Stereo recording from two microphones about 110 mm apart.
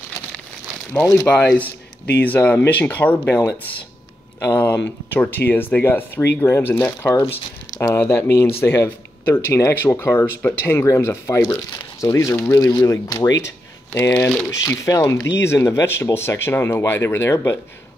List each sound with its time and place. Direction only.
1.0 s speech: 25° left (ahead or behind)
1.3 s speech: 15° left (ahead or behind)
4.4 s speech: 20° left (ahead or behind)
14.6 s speech: 30° left (ahead or behind)